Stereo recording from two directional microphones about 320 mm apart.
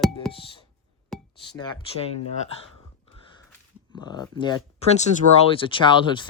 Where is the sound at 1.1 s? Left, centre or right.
Centre.